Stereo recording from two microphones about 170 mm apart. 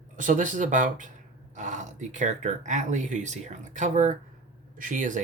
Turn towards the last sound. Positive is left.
turn(degrees=-50)  # may be behind; listen again after turning